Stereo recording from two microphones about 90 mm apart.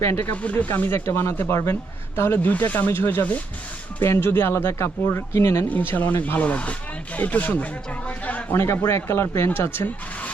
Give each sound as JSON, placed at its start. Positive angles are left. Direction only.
{"t": 0.0, "sound": "speech", "side_deg": 25}
{"t": 0.4, "sound": "speech", "side_deg": 15}
{"t": 8.5, "sound": "speech", "side_deg": 30}